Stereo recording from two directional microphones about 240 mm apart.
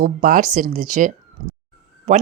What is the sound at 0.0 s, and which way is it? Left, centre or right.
Speech, right.